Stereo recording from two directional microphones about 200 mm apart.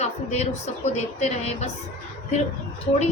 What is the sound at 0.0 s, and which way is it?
A woman's voice, 35° left (ahead or behind).